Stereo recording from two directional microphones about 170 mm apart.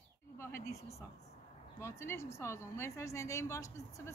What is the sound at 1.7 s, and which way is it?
A woman's voice, 15° left (ahead or behind).